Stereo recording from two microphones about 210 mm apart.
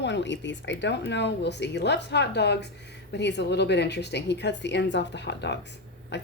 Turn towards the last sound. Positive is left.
turn(degrees=55)  # may be behind; listen again after turning